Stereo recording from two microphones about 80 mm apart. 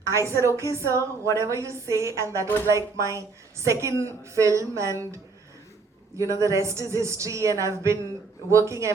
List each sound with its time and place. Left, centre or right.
0.0 s a woman's voice: right
0.9 s speech: left
1.5 s a woman's voice: right
6.4 s a woman's voice: right